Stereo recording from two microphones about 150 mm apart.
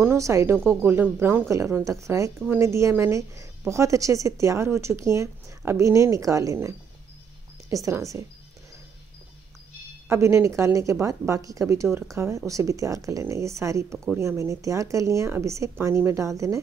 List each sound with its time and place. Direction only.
0.0 s speech: 15° right (ahead or behind)
7.7 s speech: 20° right (ahead or behind)
10.0 s speech: 15° right (ahead or behind)